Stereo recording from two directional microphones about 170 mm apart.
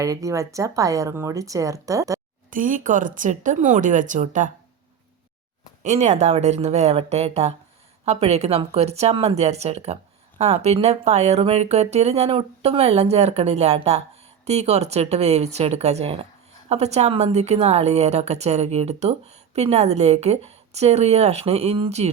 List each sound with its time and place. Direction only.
0.0 s speech: 20° right (ahead or behind)
2.5 s speech: 50° right (ahead or behind)
5.8 s speech: 45° right (ahead or behind)